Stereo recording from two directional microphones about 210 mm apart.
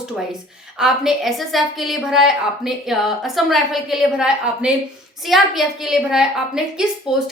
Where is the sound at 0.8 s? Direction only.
5° right (ahead or behind).